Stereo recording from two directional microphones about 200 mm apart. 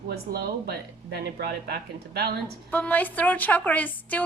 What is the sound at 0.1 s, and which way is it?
Speech, 50° right (ahead or behind).